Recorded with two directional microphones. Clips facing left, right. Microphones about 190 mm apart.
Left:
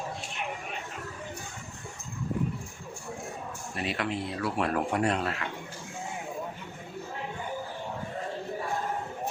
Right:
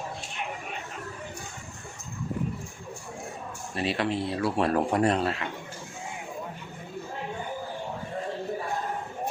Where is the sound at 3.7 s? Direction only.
30° right (ahead or behind).